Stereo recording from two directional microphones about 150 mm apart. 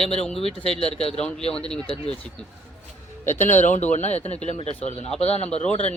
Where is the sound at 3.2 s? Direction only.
55° left (ahead or behind).